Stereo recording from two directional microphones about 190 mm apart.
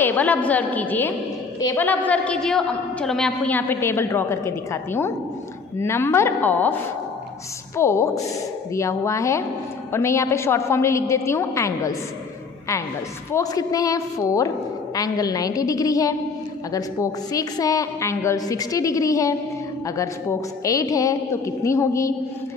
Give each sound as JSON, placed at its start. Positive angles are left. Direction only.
{"t": 0.0, "sound": "a woman's voice", "side_deg": 10}
{"t": 7.7, "sound": "a woman's voice", "side_deg": 15}
{"t": 13.3, "sound": "a woman's voice", "side_deg": 20}